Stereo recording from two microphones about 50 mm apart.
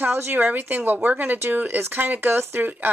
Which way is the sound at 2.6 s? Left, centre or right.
Right.